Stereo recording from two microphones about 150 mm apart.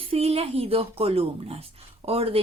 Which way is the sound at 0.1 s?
40° right (ahead or behind).